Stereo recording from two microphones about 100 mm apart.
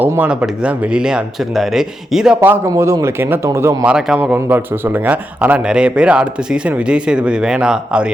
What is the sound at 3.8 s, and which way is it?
Speech, 10° right (ahead or behind).